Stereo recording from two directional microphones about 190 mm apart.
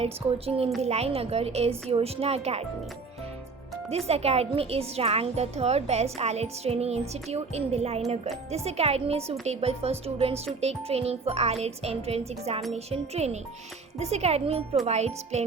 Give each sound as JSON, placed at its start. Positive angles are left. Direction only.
{"t": 0.0, "sound": "a woman's voice", "side_deg": -30}
{"t": 3.8, "sound": "a woman's voice", "side_deg": -30}